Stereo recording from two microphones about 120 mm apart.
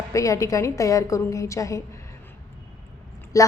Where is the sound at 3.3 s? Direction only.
25° left (ahead or behind).